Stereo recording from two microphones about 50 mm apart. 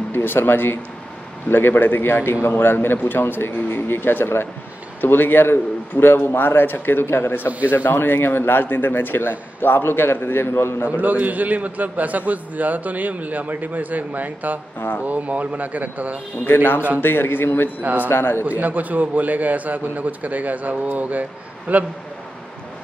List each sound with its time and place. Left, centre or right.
0.1 s a man's voice: left
11.0 s a man's voice: right
16.4 s a man's voice: left
18.4 s a man's voice: right